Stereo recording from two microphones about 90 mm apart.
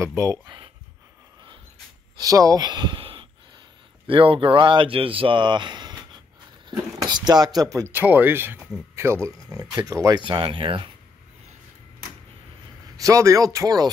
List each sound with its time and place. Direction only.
0.0 s speech: 35° right (ahead or behind)
2.1 s speech: 40° right (ahead or behind)
2.6 s a sound: 55° right (ahead or behind); by 3.3 s 80° right
4.1 s speech: 80° right; by 5.9 s 55° right (ahead or behind)
7.1 s speech: 50° right (ahead or behind)
7.9 s speech: 20° right (ahead or behind)
9.5 s speech: 45° right (ahead or behind)
10.1 s speech: 65° right (ahead or behind)
12.9 s speech: 40° right (ahead or behind)